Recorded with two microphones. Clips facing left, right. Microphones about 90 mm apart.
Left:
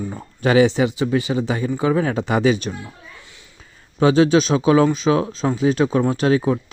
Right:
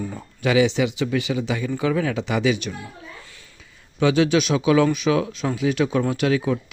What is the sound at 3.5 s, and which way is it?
Speech, 35° left (ahead or behind).